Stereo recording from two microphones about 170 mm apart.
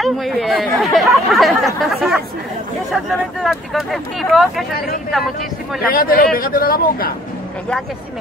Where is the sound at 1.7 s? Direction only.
Centre (ahead or behind).